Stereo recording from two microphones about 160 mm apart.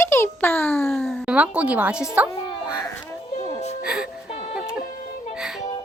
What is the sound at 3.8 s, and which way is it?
Music, 5° right (ahead or behind).